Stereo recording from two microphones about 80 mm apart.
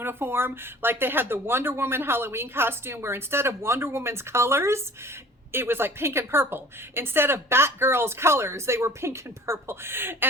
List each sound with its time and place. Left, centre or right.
0.0 s a woman's voice: right